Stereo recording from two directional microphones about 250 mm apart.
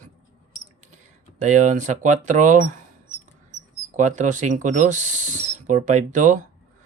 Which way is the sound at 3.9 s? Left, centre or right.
Right.